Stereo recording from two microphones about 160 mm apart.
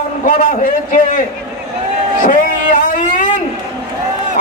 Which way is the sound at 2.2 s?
55° left (ahead or behind).